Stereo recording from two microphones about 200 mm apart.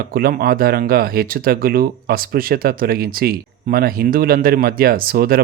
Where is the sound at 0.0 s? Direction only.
50° right (ahead or behind).